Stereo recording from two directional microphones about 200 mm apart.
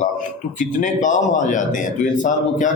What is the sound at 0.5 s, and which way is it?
A man's voice, 40° left (ahead or behind).